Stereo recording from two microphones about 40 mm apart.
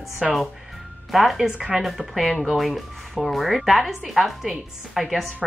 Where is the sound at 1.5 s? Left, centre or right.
Right.